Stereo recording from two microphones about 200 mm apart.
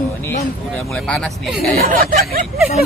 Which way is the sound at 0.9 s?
5° left (ahead or behind).